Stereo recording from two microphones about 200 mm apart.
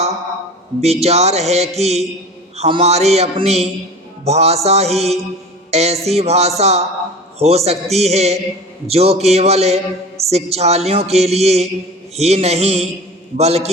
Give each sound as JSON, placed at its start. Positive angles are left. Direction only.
{"t": 0.8, "sound": "speech", "side_deg": -30}